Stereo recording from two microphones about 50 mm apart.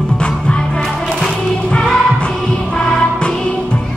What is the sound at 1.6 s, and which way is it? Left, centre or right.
Music, centre.